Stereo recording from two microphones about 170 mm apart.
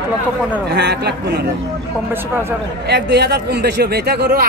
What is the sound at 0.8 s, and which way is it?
Speech, 75° right (ahead or behind).